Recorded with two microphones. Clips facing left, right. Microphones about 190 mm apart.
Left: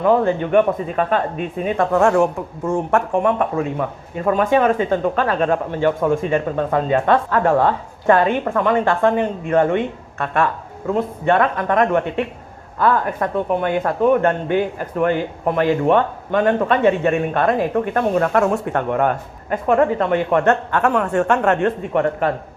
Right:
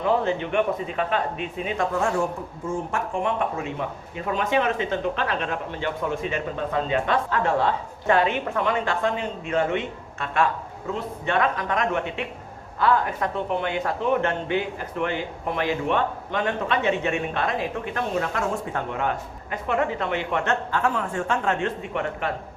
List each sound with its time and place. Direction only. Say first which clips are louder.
0.0 s a man's voice: left 7 dB; 50° left (ahead or behind)
21.9 s a man's voice: left 9 dB; 45° left (ahead or behind)